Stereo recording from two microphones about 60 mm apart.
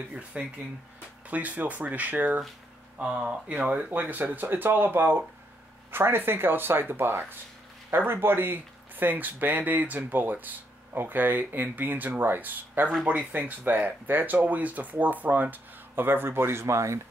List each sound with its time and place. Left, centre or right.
0.1 s speech: right